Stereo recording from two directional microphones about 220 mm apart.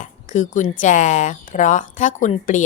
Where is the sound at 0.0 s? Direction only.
35° left (ahead or behind).